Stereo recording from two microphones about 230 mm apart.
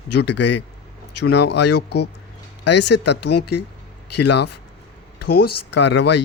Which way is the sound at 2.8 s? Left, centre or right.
Left.